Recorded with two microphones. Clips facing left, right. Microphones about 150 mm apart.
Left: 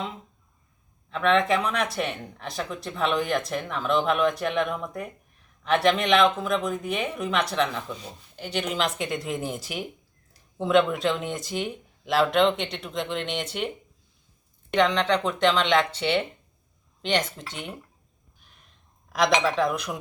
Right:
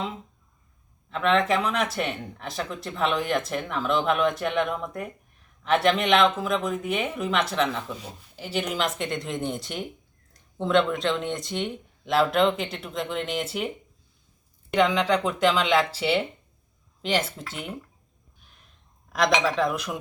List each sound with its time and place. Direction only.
1.1 s speech: centre (ahead or behind)
14.7 s speech: 5° right (ahead or behind)
19.1 s speech: centre (ahead or behind)